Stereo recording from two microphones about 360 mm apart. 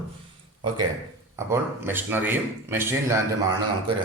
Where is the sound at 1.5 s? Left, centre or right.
Centre.